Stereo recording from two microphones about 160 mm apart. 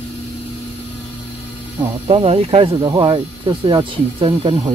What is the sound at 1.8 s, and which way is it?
Speech, 30° right (ahead or behind).